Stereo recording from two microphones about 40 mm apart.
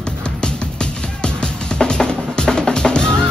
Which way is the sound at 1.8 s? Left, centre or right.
Centre.